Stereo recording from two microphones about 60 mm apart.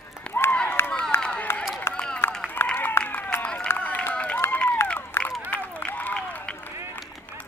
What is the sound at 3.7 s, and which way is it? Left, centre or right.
Run, left.